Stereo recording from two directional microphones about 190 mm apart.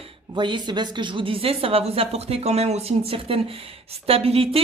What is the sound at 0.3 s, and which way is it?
Speech, 25° right (ahead or behind).